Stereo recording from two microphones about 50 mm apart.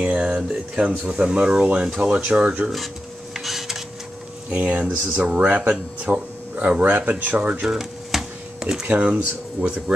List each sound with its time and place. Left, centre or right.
0.0 s a sound: right
0.5 s speech: right
3.3 s printer: centre
4.5 s speech: right
7.6 s a sound: centre
9.0 s speech: right